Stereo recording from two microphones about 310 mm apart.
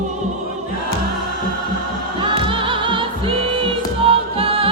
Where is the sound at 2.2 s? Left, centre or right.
Centre.